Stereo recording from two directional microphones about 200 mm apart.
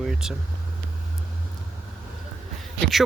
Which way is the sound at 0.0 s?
Centre (ahead or behind).